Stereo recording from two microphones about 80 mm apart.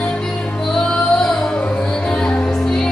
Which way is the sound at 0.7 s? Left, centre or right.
Centre.